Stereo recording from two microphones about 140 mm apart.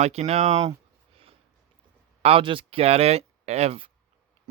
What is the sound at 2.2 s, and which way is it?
Speech, 40° right (ahead or behind).